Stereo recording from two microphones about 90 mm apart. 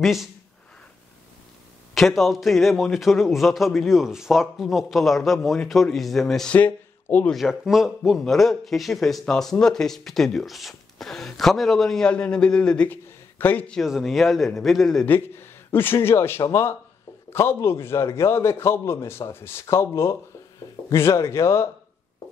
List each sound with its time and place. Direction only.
0.0 s a man's voice: centre (ahead or behind)
2.0 s a man's voice: centre (ahead or behind)
6.5 s speech: 20° left (ahead or behind)
7.3 s a man's voice: centre (ahead or behind); by 13.7 s 20° left (ahead or behind)
13.8 s a man's voice: centre (ahead or behind)
15.0 s a man's voice: 25° left (ahead or behind)